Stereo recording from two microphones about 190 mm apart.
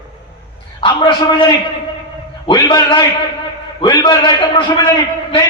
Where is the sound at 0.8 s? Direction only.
25° left (ahead or behind).